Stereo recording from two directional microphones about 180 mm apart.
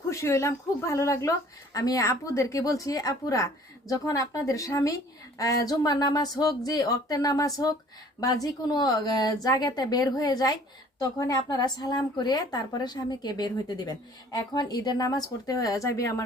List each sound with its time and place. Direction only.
0.1 s a woman's voice: 15° left (ahead or behind)